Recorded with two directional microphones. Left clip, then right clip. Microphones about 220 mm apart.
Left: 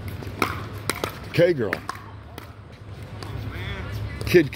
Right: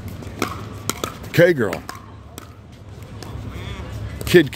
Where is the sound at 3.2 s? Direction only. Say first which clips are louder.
Even; 45° right (ahead or behind).